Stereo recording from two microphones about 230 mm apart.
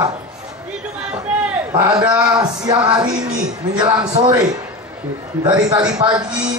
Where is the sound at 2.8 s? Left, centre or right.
Centre.